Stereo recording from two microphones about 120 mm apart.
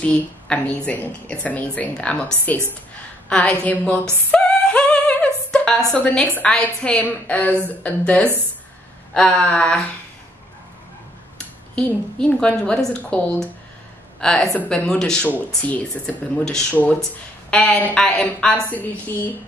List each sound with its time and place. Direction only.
0.0 s a woman's voice: 10° left (ahead or behind)
4.3 s a sound: 10° left (ahead or behind)
6.0 s a woman's voice: 5° left (ahead or behind)
11.3 s a woman's voice: 5° left (ahead or behind)
14.2 s a woman's voice: 5° left (ahead or behind)